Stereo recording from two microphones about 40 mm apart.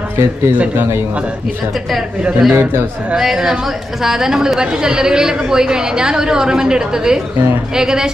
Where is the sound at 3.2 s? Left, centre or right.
Centre.